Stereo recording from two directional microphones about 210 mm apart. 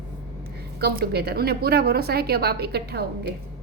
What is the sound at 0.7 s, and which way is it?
A woman's voice, 50° right (ahead or behind).